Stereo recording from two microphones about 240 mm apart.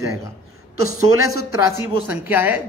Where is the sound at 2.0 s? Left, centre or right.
Centre.